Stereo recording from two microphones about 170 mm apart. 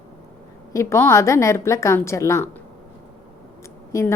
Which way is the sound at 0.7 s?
15° left (ahead or behind).